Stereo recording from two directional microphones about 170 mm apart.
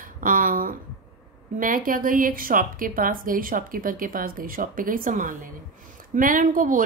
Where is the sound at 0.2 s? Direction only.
55° right (ahead or behind).